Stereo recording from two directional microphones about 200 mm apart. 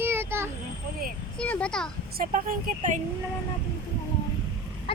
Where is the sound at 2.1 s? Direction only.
45° right (ahead or behind).